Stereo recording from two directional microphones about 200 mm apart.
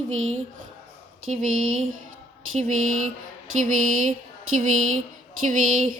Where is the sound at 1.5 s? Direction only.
90° right.